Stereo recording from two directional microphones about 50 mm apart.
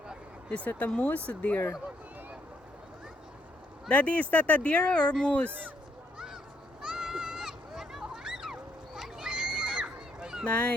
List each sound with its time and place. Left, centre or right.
0.5 s speech: left
3.8 s speech: left
6.1 s a sound: centre
10.4 s speech: left